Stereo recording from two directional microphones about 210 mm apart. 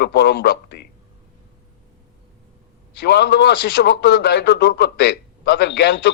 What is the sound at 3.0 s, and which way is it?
A man's voice, 55° left (ahead or behind).